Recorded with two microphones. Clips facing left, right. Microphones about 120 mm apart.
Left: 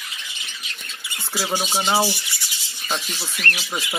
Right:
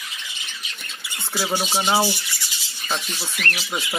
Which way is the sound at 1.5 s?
5° right (ahead or behind).